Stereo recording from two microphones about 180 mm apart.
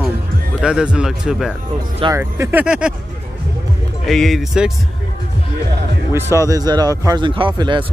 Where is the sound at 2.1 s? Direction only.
15° right (ahead or behind).